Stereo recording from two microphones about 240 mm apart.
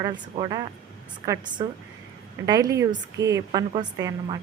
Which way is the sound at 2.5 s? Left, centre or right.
Centre.